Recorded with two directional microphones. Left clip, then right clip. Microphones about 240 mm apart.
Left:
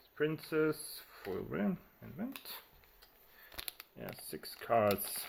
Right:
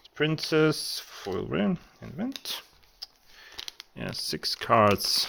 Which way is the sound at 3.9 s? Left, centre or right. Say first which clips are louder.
Right 16 dB; right.